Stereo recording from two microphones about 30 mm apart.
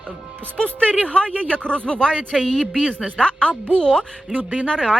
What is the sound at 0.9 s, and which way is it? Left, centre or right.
Speech, left.